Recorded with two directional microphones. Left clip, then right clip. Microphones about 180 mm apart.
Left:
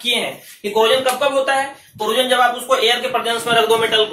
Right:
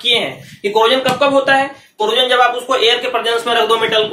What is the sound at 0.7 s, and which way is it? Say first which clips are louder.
Speech: right 2 dB; 40° right (ahead or behind).